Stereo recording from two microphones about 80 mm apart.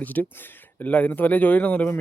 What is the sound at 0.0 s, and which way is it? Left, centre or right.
Speech, left.